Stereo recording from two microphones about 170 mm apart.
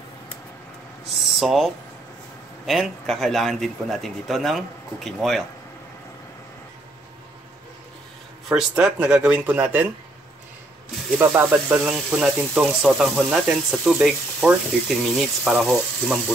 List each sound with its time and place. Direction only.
1.2 s a sound: centre (ahead or behind)
2.6 s speech: centre (ahead or behind)
8.5 s speech: 5° right (ahead or behind)
11.1 s speech: 10° right (ahead or behind)